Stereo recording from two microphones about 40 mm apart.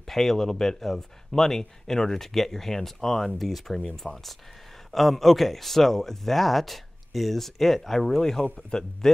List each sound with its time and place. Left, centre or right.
0.0 s speech: centre